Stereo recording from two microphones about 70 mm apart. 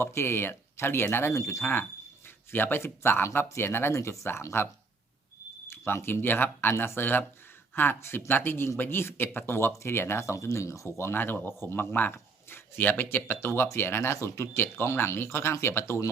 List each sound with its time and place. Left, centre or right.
0.0 s speech: left
1.3 s speech: left
2.2 s a man's voice: left